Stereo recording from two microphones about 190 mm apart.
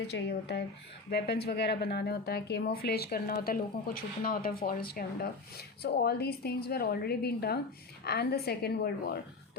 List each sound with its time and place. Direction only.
0.1 s speech: 60° left (ahead or behind)